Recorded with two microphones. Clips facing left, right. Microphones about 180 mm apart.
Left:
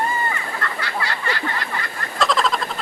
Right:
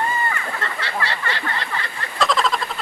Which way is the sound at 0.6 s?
25° right (ahead or behind).